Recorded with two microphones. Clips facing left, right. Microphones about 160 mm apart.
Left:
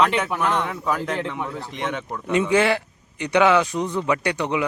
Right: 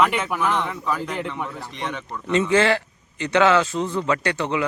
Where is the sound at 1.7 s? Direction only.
15° left (ahead or behind).